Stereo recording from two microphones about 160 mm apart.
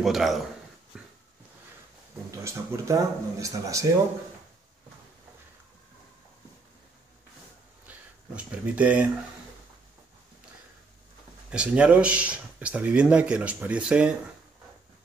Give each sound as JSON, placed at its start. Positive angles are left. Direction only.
{"t": 0.0, "sound": "speech", "side_deg": 0}
{"t": 0.9, "sound": "a sound", "side_deg": -5}
{"t": 2.4, "sound": "speech", "side_deg": -20}
{"t": 7.9, "sound": "a sound", "side_deg": -10}
{"t": 8.4, "sound": "speech", "side_deg": -10}
{"t": 11.5, "sound": "speech", "side_deg": -5}